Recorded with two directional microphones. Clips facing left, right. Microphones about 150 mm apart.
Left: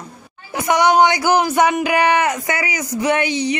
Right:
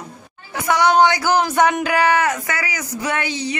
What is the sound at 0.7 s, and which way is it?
Speech, 15° left (ahead or behind).